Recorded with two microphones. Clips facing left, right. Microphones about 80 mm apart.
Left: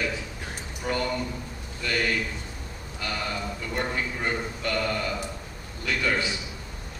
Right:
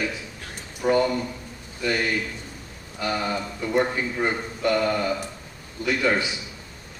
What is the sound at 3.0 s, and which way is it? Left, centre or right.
A man's voice, right.